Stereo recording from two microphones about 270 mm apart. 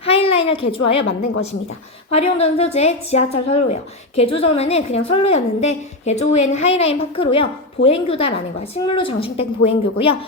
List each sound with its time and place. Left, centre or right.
0.0 s a sound: left
0.5 s a woman's voice: centre
0.8 s a woman's voice: left
2.1 s a woman's voice: left